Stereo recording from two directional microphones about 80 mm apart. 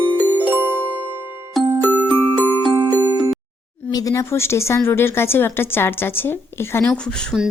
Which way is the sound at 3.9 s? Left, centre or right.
Left.